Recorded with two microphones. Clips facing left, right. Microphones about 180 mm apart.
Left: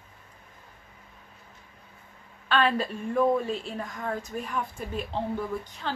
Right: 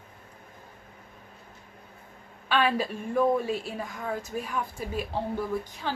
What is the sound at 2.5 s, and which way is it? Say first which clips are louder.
A woman's voice: even; 10° right (ahead or behind).